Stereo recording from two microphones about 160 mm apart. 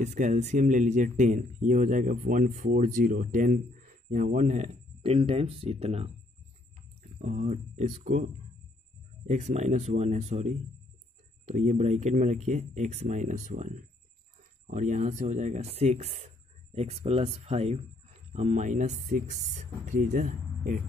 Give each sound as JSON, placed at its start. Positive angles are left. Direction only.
{"t": 0.0, "sound": "speech", "side_deg": -50}
{"t": 9.3, "sound": "speech", "side_deg": -45}